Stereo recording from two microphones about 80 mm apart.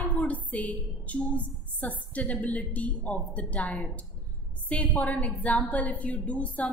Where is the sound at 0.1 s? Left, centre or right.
Centre.